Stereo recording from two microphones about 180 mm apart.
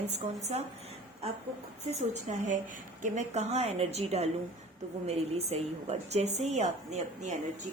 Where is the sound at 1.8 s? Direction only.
40° right (ahead or behind).